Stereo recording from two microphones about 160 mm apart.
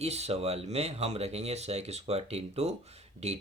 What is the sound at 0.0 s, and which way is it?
Speech, 40° right (ahead or behind).